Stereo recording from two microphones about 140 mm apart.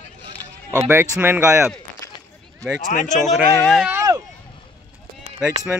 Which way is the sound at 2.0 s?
25° left (ahead or behind).